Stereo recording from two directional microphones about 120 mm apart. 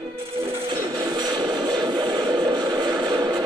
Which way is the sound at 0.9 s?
35° right (ahead or behind).